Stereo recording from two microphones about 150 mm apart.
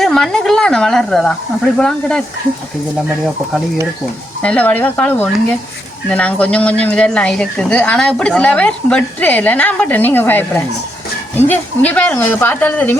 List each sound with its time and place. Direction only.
0.0 s speech: 5° left (ahead or behind)
4.4 s speech: 10° left (ahead or behind)